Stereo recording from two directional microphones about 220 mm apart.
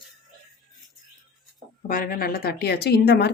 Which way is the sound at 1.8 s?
40° left (ahead or behind).